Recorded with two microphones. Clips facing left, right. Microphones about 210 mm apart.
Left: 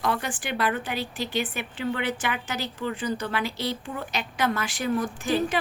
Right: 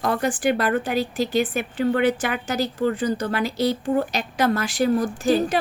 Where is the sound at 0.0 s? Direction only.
40° right (ahead or behind).